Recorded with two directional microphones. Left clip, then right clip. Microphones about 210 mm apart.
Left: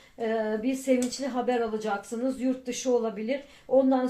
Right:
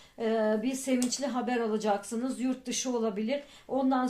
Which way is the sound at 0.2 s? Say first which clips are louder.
Left 1 dB; 40° right (ahead or behind).